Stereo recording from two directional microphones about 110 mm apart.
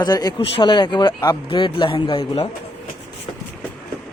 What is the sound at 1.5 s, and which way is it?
Speech, 50° left (ahead or behind).